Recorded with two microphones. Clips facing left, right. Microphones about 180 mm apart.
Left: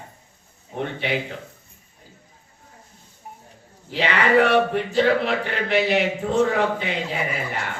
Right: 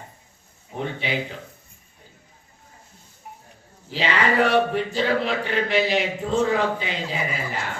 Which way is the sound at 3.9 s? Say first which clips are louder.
Left 3 dB; 60° left (ahead or behind).